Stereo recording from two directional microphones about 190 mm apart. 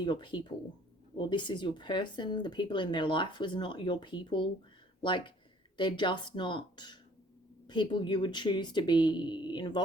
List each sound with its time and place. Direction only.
0.0 s speech: 25° left (ahead or behind)